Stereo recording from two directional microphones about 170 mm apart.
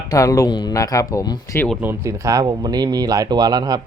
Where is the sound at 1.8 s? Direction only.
15° right (ahead or behind).